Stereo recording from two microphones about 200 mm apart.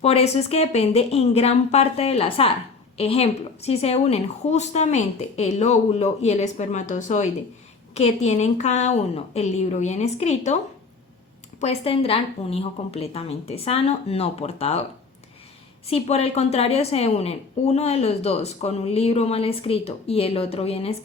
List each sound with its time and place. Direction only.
0.0 s a woman's voice: 30° left (ahead or behind)
11.6 s a woman's voice: 30° left (ahead or behind)
15.9 s a woman's voice: 30° left (ahead or behind)